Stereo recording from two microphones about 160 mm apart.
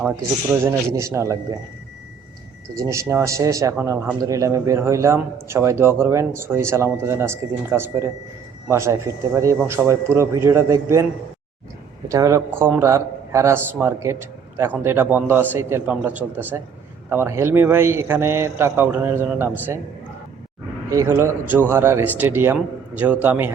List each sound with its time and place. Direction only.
0.2 s a man's voice: 15° right (ahead or behind)
2.8 s a man's voice: 20° right (ahead or behind)
12.0 s a man's voice: 20° right (ahead or behind)
20.9 s a man's voice: 15° right (ahead or behind)